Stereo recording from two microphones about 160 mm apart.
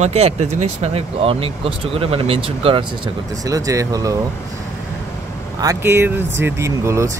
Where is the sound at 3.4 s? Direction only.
20° right (ahead or behind).